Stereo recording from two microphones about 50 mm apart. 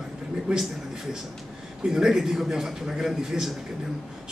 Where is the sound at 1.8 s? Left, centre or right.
Centre.